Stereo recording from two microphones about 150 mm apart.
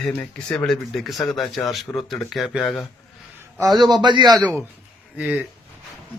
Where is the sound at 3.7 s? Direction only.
30° right (ahead or behind).